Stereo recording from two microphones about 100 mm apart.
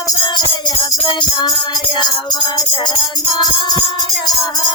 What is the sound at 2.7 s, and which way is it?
Music, 60° left (ahead or behind).